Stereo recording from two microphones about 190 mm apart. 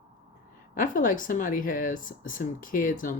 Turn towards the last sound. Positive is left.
turn(degrees=45)  # may be behind; listen again after turning